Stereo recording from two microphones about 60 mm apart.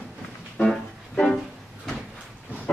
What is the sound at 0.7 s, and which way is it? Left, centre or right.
Music, centre.